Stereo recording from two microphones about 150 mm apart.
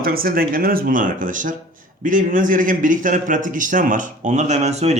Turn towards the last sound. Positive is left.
turn(degrees=-45)  # may be behind; listen again after turning